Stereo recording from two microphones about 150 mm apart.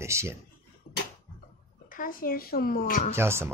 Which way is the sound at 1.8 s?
70° left (ahead or behind).